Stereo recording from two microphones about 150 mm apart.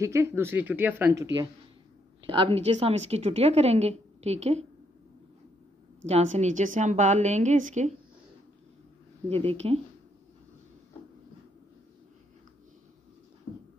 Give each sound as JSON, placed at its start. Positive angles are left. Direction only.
{"t": 0.0, "sound": "speech", "side_deg": -20}
{"t": 2.2, "sound": "a woman's voice", "side_deg": -35}
{"t": 6.0, "sound": "a woman's voice", "side_deg": -50}
{"t": 9.3, "sound": "speech", "side_deg": -40}